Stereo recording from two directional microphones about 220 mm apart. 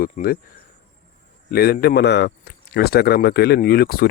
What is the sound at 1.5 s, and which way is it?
Speech, 45° left (ahead or behind).